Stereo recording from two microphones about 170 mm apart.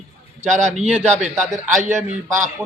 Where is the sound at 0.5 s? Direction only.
45° right (ahead or behind).